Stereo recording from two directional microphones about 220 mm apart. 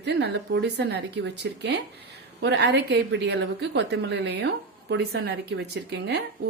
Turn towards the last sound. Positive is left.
turn(degrees=-50)  # may be behind; listen again after turning